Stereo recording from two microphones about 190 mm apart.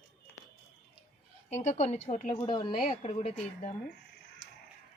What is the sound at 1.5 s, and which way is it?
Speech, 35° left (ahead or behind).